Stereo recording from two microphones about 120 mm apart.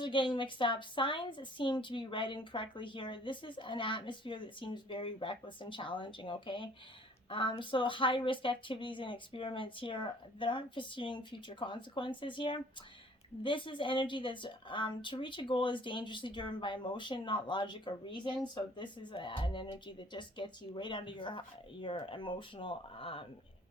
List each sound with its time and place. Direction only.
0.0 s a woman's voice: 40° left (ahead or behind)